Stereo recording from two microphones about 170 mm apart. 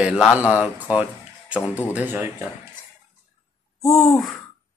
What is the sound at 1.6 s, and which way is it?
Speech, 15° left (ahead or behind).